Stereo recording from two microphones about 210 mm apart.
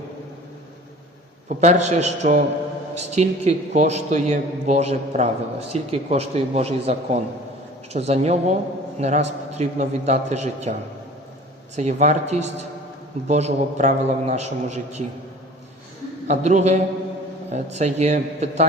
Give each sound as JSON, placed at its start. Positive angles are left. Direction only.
{"t": 1.5, "sound": "a man's voice", "side_deg": -35}
{"t": 11.8, "sound": "a man's voice", "side_deg": -30}
{"t": 16.2, "sound": "a man's voice", "side_deg": -35}